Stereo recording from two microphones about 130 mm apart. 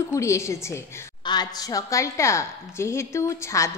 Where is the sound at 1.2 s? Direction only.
35° left (ahead or behind).